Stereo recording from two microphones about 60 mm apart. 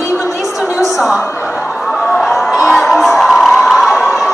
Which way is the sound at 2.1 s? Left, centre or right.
Centre.